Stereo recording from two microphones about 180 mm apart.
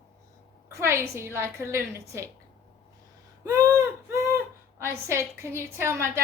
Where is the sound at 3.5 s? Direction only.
20° right (ahead or behind).